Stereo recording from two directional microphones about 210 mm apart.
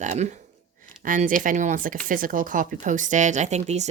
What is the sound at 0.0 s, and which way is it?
Speech, 35° right (ahead or behind).